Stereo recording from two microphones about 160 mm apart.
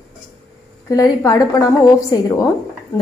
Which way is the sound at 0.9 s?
20° left (ahead or behind).